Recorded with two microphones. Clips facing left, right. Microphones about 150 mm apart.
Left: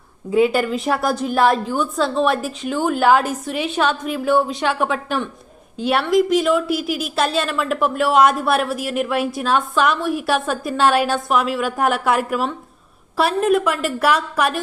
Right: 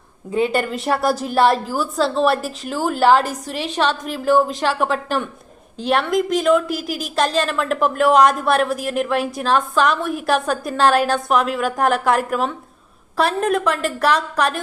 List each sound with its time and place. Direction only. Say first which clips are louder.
0.3 s a woman's voice: left 3 dB; 5° left (ahead or behind)
6.7 s a woman's voice: left 3 dB; 40° right (ahead or behind)
7.2 s a woman's voice: right 2 dB; 5° left (ahead or behind)